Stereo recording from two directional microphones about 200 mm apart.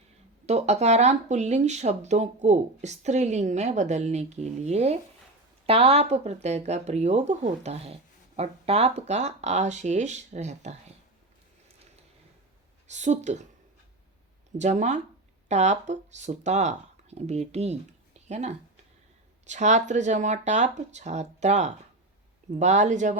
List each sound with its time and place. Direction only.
0.4 s speech: 35° right (ahead or behind)
12.9 s speech: 35° right (ahead or behind)
14.6 s speech: 35° right (ahead or behind)